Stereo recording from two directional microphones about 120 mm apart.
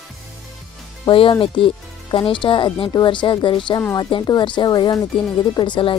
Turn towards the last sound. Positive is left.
turn(degrees=45)  # may be behind; listen again after turning